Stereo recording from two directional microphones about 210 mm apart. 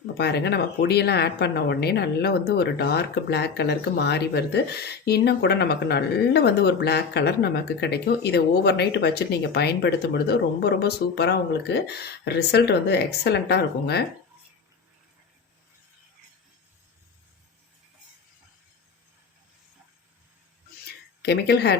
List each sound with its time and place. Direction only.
0.2 s speech: 50° left (ahead or behind)
21.2 s speech: 50° left (ahead or behind)